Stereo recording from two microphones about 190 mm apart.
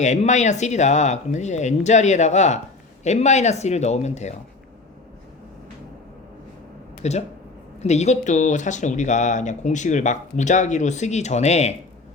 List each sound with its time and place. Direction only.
0.0 s speech: 40° left (ahead or behind)
7.0 s speech: 35° left (ahead or behind)